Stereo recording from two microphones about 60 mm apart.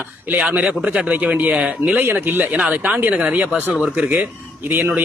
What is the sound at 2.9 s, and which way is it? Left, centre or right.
A man's voice, right.